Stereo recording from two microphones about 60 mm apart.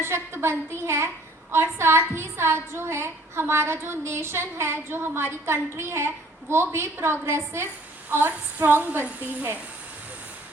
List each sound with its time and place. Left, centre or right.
0.0 s a woman's voice: right